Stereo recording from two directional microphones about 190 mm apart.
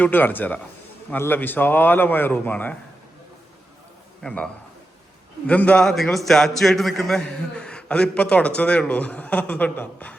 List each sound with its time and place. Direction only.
0.0 s a man's voice: 10° left (ahead or behind)
4.2 s a man's voice: 5° left (ahead or behind)
5.5 s a man's voice: 5° left (ahead or behind)